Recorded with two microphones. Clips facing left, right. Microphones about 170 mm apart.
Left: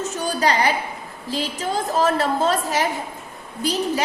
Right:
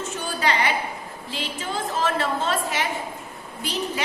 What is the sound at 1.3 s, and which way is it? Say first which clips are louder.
A woman's voice: left 6 dB; 40° left (ahead or behind).